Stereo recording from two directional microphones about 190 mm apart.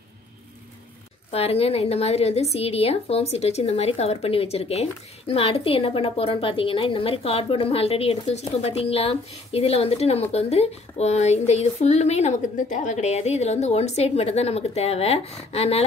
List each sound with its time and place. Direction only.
1.3 s a woman's voice: 30° left (ahead or behind)